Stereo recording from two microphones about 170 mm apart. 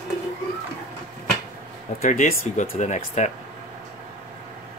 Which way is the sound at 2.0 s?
45° left (ahead or behind).